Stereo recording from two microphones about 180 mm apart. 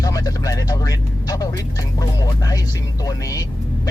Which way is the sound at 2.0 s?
20° left (ahead or behind).